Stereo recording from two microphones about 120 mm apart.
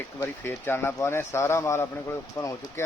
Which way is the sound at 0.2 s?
20° left (ahead or behind).